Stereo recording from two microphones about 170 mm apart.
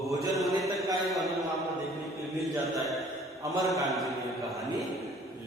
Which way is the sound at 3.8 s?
Centre (ahead or behind).